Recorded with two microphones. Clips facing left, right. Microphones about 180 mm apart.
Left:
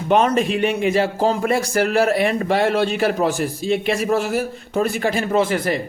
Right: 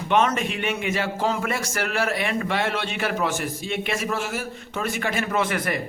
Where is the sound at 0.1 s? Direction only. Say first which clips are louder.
Left 5 dB; 35° left (ahead or behind).